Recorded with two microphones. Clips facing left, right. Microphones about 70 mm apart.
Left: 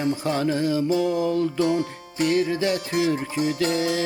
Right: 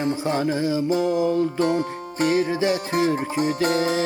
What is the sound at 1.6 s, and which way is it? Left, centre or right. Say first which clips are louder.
Music: right 1 dB; right.